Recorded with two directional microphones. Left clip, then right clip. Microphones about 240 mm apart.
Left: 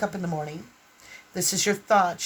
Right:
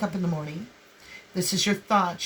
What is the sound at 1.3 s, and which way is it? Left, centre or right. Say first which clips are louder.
Speech: left 1 dB; left.